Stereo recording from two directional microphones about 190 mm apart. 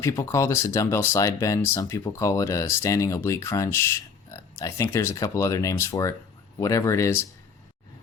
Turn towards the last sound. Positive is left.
turn(degrees=15)  # may be behind; listen again after turning